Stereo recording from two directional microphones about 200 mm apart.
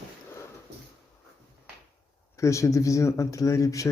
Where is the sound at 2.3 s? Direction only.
15° left (ahead or behind).